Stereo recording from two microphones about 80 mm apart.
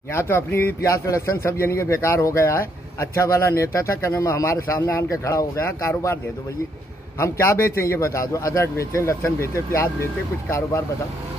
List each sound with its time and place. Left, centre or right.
0.1 s a man's voice: left
7.2 s a man's voice: left